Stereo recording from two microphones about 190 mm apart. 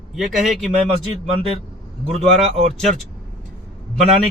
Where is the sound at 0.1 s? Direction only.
Centre (ahead or behind).